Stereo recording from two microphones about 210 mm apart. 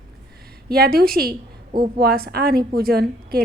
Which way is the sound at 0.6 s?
45° right (ahead or behind).